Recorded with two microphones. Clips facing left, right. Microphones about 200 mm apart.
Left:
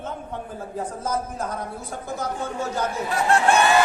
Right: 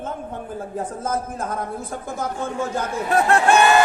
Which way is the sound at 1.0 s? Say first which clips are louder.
Right 1 dB; 50° right (ahead or behind).